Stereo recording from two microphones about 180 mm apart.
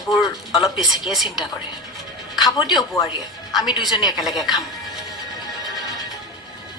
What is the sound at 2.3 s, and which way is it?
Music, centre (ahead or behind).